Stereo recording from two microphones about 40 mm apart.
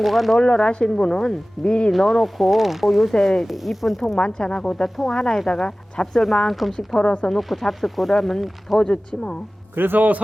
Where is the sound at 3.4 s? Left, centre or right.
Centre.